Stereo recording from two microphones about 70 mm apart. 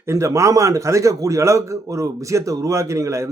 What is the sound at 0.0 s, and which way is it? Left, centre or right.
Speech, right.